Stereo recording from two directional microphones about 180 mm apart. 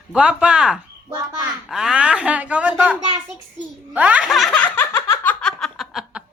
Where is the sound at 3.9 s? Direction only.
10° right (ahead or behind).